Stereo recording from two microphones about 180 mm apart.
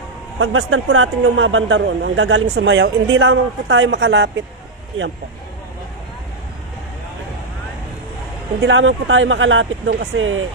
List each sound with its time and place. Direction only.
0.3 s a man's voice: 90° right; by 4.4 s 75° right (ahead or behind)
8.6 s a man's voice: 90° right